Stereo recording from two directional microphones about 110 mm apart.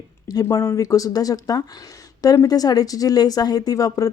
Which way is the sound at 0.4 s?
25° left (ahead or behind).